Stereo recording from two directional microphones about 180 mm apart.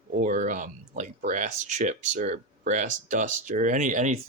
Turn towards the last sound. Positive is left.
turn(degrees=-45)  # may be behind; listen again after turning